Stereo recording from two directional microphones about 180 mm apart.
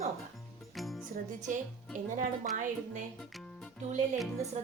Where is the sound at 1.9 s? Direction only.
45° right (ahead or behind).